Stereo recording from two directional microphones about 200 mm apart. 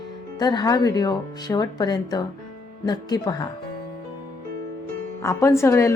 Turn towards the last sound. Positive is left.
turn(degrees=15)  # may be behind; listen again after turning